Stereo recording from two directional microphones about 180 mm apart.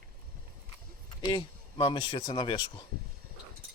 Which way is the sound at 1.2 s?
25° left (ahead or behind).